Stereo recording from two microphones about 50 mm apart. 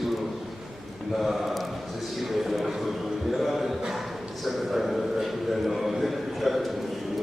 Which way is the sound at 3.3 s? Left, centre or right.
Centre.